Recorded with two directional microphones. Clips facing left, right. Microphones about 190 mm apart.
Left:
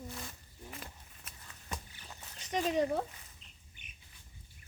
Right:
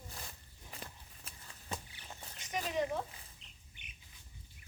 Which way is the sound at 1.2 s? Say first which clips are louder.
Right 1 dB; 30° right (ahead or behind).